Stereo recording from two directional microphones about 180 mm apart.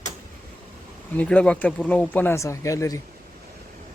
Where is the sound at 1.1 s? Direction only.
5° left (ahead or behind).